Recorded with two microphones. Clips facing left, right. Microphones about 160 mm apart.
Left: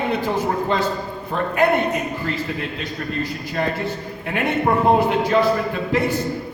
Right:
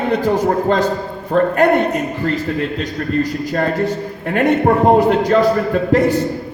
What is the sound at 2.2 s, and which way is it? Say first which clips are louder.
A man's voice: right 7 dB; 45° right (ahead or behind).